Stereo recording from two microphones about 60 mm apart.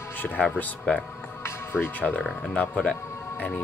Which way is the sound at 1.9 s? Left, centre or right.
Left.